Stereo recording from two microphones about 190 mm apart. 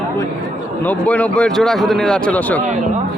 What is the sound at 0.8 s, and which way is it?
A man's voice, 5° left (ahead or behind).